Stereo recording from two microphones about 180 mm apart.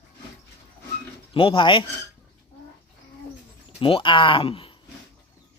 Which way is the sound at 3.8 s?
30° left (ahead or behind).